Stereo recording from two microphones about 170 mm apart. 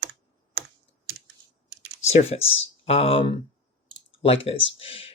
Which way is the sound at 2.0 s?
40° left (ahead or behind).